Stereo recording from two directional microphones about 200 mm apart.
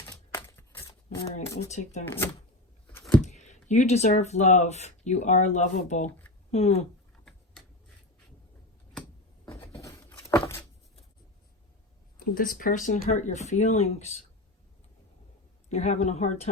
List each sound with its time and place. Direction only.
0.1 s a sound: 15° left (ahead or behind)
1.7 s speech: 35° left (ahead or behind)
2.0 s speech: 10° left (ahead or behind)
3.2 s speech: 35° left (ahead or behind)
10.1 s a sound: 10° left (ahead or behind)
12.2 s speech: 45° left (ahead or behind)
15.7 s speech: 35° left (ahead or behind)